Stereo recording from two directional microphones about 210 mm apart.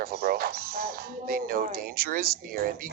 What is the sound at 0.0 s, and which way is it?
Speech, 45° right (ahead or behind).